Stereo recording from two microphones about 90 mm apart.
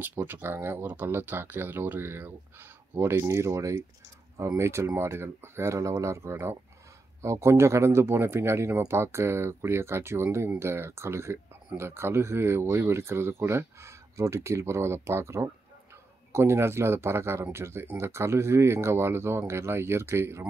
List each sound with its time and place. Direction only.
0.0 s speech: 20° right (ahead or behind)